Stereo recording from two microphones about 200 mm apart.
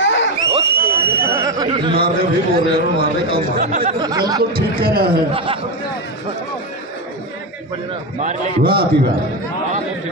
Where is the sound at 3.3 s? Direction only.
45° right (ahead or behind).